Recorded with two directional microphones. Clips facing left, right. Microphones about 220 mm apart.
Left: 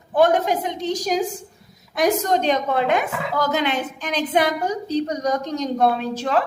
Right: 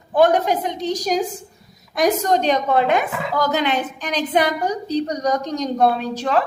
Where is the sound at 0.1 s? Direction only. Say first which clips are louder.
Right 1 dB; 45° right (ahead or behind).